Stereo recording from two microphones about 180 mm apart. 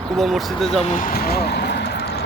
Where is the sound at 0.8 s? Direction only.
45° left (ahead or behind); by 2.1 s 65° left (ahead or behind).